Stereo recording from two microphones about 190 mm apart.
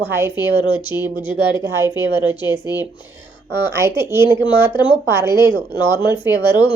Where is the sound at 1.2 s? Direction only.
25° left (ahead or behind).